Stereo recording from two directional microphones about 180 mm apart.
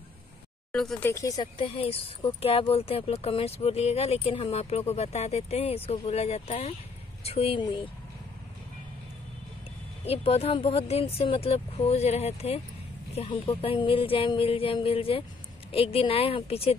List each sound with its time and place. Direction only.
0.7 s speech: 5° left (ahead or behind); by 7.9 s 25° left (ahead or behind)
10.0 s speech: 35° left (ahead or behind)